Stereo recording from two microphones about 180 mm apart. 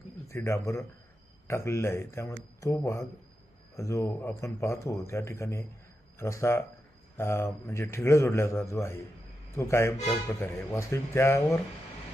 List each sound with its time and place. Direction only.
0.3 s speech: 15° left (ahead or behind)